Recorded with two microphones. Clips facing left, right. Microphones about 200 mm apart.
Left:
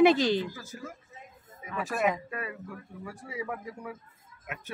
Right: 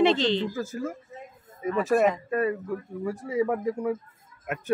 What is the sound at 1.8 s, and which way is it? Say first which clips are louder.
Speech: right 6 dB; 40° right (ahead or behind).